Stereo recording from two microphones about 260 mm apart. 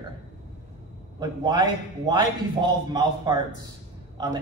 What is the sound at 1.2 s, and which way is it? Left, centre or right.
Speech, centre.